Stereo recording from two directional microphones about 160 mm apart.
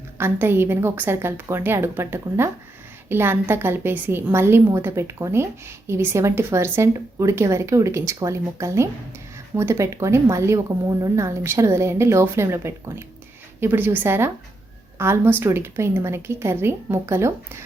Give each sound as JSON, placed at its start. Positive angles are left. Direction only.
{"t": 0.2, "sound": "a woman's voice", "side_deg": -15}